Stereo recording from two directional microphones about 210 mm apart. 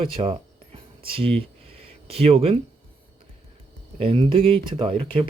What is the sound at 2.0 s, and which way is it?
Speech, 25° right (ahead or behind).